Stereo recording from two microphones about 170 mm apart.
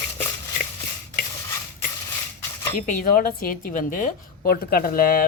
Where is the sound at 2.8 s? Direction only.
55° left (ahead or behind).